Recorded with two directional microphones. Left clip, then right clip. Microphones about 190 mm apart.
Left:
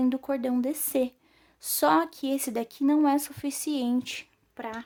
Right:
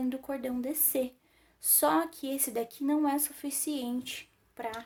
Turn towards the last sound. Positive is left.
turn(degrees=35)  # may be behind; listen again after turning